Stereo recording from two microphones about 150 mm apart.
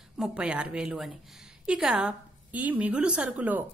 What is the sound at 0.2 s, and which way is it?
A woman's voice, 5° right (ahead or behind).